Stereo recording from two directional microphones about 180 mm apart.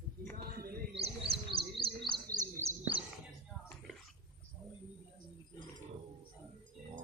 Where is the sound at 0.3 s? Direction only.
55° right (ahead or behind).